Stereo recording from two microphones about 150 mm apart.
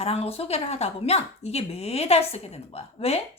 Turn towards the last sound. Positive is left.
turn(degrees=40)  # may be behind; listen again after turning